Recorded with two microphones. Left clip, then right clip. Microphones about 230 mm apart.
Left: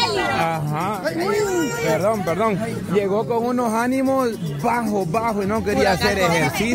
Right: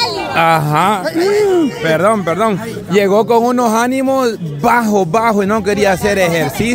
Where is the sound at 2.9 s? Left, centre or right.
Right.